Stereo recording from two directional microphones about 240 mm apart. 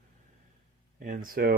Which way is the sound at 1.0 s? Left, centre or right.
Right.